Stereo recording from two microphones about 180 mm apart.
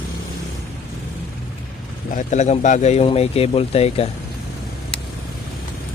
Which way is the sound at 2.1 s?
40° left (ahead or behind).